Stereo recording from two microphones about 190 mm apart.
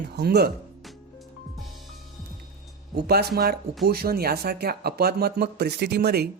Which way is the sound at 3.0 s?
55° right (ahead or behind).